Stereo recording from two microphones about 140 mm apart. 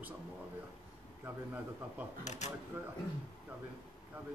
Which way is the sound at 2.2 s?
55° left (ahead or behind).